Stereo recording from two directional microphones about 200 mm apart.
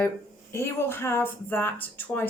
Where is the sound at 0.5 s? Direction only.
10° left (ahead or behind).